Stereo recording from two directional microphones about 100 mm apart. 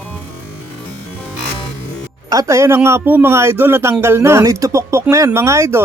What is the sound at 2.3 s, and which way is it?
A man's voice, 35° right (ahead or behind).